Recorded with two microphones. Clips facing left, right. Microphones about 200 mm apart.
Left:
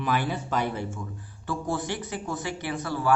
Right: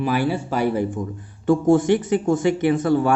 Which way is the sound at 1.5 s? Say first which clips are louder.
Right 14 dB; 45° right (ahead or behind).